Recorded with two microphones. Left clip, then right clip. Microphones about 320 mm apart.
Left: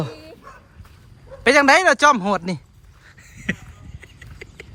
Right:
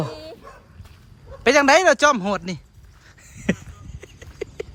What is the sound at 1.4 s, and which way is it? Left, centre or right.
Speech, centre.